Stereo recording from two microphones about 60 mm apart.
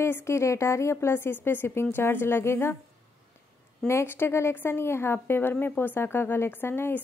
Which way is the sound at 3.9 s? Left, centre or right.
Left.